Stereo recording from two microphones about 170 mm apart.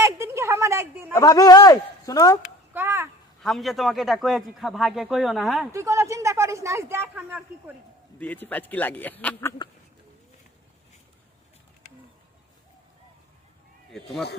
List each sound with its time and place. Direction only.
0.0 s a sound: 15° right (ahead or behind)
1.1 s a man's voice: 20° left (ahead or behind)
2.7 s a sound: 15° right (ahead or behind)
3.4 s a man's voice: centre (ahead or behind)
5.7 s a woman's voice: 15° right (ahead or behind)
8.2 s a man's voice: 10° left (ahead or behind)
13.9 s a man's voice: centre (ahead or behind)